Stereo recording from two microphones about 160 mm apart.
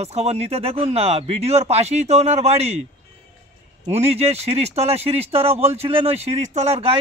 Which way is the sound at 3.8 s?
40° right (ahead or behind).